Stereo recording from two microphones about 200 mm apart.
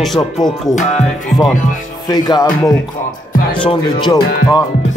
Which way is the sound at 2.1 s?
20° left (ahead or behind).